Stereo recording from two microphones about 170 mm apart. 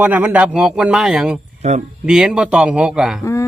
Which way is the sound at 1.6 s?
40° right (ahead or behind).